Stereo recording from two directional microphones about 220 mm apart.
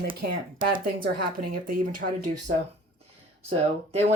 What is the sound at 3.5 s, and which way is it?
Speech, 30° right (ahead or behind).